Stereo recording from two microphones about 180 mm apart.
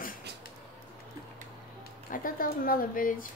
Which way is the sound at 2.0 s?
50° left (ahead or behind).